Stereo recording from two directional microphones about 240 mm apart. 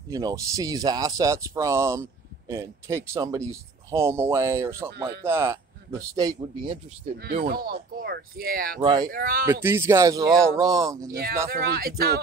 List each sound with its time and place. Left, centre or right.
0.1 s speech: centre
7.0 s speech: right
8.8 s speech: centre
9.1 s speech: right
9.5 s speech: centre
11.5 s speech: right